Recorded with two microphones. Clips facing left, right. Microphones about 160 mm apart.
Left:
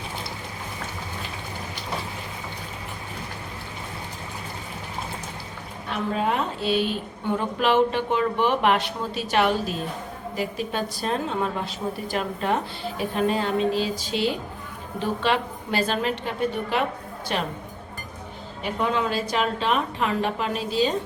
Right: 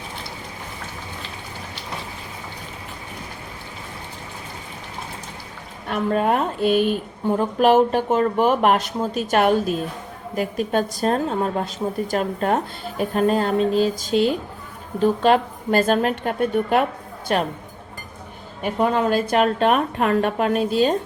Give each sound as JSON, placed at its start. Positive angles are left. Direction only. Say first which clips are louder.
{"t": 5.9, "sound": "a woman's voice", "louder": "right 5 dB", "side_deg": -50}
{"t": 18.6, "sound": "a woman's voice", "louder": "right 5 dB", "side_deg": -45}